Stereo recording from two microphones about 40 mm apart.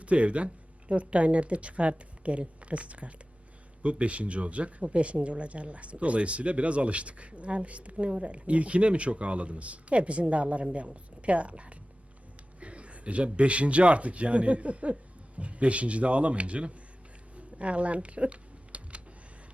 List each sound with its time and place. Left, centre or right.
0.0 s speech: right
17.3 s typing: right